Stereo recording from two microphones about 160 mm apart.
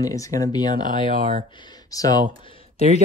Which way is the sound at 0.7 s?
55° right (ahead or behind).